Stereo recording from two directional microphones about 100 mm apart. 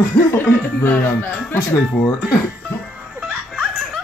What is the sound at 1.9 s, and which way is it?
Speech, 5° left (ahead or behind).